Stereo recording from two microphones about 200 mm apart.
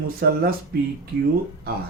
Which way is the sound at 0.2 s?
50° right (ahead or behind).